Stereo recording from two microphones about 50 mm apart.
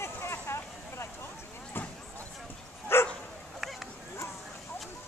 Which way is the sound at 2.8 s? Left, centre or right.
Left.